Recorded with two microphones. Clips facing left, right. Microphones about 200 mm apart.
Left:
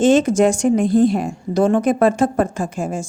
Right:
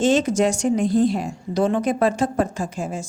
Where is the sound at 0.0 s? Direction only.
50° left (ahead or behind).